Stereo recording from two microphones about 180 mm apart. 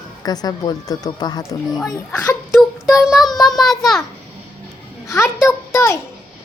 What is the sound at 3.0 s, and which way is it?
Child singing, centre (ahead or behind).